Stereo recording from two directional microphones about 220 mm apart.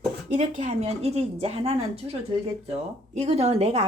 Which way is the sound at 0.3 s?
30° right (ahead or behind).